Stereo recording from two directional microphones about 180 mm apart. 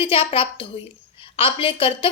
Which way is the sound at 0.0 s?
30° left (ahead or behind).